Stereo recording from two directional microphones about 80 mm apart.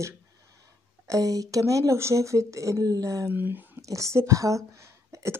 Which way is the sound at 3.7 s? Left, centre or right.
Right.